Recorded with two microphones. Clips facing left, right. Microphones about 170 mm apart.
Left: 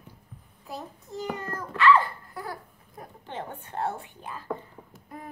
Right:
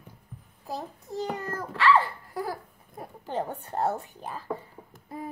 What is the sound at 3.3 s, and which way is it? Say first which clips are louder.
A child's voice: right 6 dB; 40° right (ahead or behind).